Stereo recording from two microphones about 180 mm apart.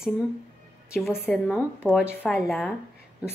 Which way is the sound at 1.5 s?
5° left (ahead or behind).